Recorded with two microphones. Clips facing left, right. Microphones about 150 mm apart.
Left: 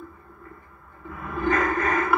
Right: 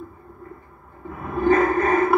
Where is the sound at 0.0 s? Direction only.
30° right (ahead or behind).